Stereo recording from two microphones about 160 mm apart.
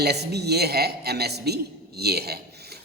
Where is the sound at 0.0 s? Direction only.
90° right.